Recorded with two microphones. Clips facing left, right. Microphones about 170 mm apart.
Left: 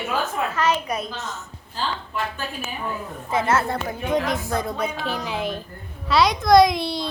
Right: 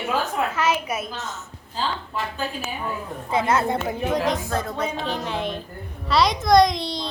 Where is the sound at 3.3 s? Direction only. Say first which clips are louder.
Even; 15° right (ahead or behind).